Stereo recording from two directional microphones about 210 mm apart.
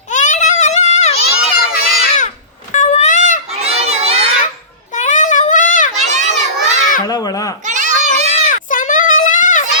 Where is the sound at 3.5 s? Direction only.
30° right (ahead or behind).